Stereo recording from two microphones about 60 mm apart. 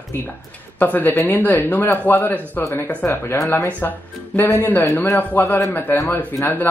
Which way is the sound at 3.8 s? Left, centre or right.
Left.